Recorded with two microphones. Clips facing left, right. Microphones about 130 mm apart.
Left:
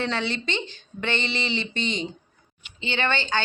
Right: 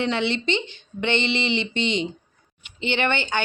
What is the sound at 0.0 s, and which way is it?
Mantra, 20° right (ahead or behind).